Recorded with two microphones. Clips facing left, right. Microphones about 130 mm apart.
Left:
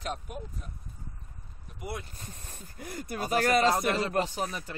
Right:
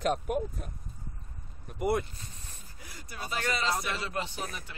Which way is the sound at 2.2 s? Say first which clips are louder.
Left 3 dB; 50° left (ahead or behind).